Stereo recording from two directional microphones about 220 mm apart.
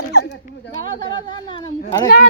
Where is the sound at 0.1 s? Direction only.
45° left (ahead or behind).